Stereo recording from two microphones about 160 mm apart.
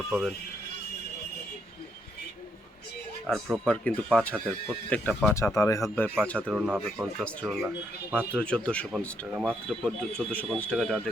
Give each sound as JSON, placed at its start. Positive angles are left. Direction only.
{"t": 0.1, "sound": "speech", "side_deg": 0}
{"t": 3.2, "sound": "speech", "side_deg": 0}
{"t": 6.2, "sound": "speech", "side_deg": 5}